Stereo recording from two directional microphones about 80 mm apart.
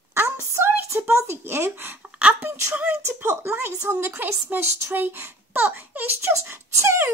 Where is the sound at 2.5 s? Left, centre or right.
Right.